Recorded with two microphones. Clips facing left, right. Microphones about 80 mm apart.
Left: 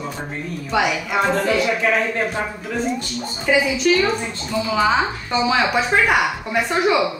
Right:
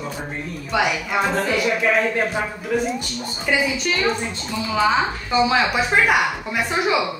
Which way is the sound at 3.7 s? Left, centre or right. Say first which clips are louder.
Left 4 dB; centre.